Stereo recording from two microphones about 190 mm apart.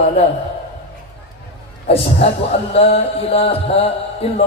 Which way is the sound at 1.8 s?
30° left (ahead or behind).